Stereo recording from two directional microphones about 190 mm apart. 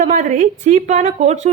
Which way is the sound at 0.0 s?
40° right (ahead or behind).